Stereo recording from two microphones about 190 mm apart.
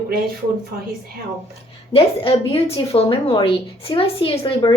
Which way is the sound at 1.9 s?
30° left (ahead or behind).